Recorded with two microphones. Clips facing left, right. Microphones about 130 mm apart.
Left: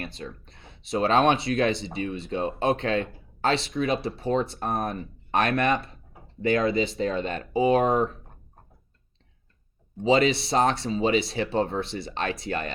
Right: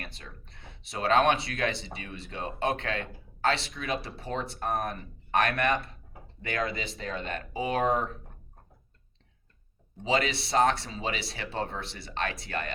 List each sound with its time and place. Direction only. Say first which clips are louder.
0.0 s speech: left 9 dB; 25° left (ahead or behind)
10.0 s speech: left 7 dB; 25° left (ahead or behind)